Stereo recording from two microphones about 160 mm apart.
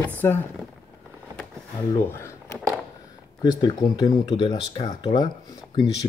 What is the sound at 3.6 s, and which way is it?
Speech, 25° left (ahead or behind).